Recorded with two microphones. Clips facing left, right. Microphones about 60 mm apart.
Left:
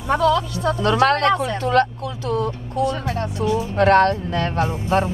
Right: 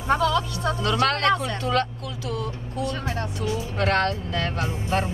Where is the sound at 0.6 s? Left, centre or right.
Left.